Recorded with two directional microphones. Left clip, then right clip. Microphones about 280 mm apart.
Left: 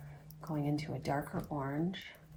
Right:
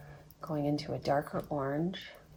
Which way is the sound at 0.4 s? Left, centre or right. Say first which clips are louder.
Right 4 dB; right.